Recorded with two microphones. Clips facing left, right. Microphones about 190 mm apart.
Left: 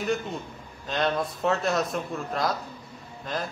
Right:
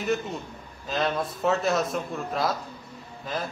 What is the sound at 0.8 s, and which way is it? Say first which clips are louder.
A man's voice: even; centre (ahead or behind).